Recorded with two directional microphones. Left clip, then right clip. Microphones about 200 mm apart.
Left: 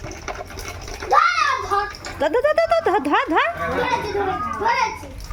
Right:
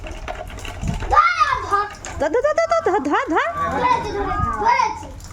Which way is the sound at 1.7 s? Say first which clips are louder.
Right 3 dB; 55° left (ahead or behind).